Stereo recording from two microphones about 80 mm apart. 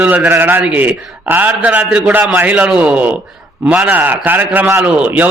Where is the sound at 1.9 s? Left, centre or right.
Centre.